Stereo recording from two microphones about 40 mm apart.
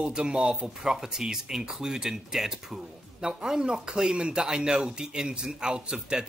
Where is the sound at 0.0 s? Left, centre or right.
Right.